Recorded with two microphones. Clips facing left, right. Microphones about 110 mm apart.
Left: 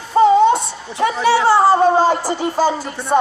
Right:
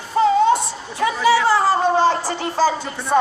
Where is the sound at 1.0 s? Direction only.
25° left (ahead or behind).